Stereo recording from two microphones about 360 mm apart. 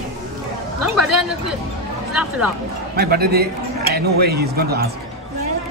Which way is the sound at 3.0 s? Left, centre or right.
Right.